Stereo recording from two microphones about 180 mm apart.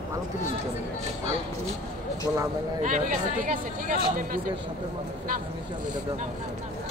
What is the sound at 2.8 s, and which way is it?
Speech, 45° right (ahead or behind).